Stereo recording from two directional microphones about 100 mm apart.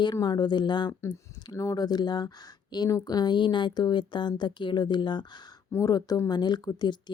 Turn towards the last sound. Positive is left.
turn(degrees=45)  # may be behind; listen again after turning